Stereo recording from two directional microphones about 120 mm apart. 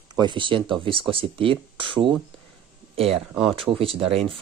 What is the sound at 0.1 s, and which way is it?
Speech, 40° right (ahead or behind).